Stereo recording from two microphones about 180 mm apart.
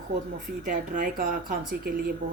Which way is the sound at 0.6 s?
45° right (ahead or behind).